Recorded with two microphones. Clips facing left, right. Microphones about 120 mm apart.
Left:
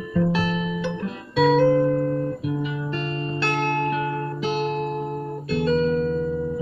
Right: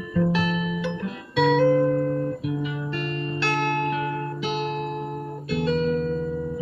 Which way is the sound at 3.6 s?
35° left (ahead or behind).